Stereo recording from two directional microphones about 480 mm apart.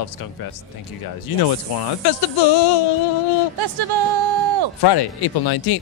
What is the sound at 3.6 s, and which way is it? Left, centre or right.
Speech, right.